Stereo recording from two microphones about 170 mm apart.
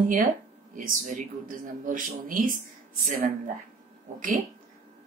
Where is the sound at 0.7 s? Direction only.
50° right (ahead or behind).